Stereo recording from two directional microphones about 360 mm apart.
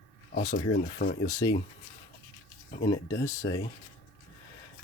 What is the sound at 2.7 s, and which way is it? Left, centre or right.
Speech, centre.